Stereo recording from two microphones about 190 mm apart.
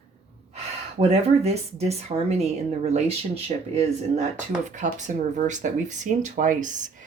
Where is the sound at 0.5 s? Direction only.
35° right (ahead or behind).